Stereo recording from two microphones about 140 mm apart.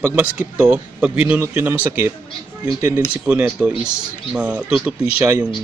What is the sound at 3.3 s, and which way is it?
Speech, 10° right (ahead or behind).